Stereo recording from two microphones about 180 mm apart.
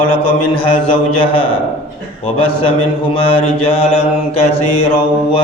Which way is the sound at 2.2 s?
30° left (ahead or behind).